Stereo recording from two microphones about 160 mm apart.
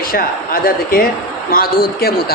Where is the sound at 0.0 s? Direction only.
65° left (ahead or behind).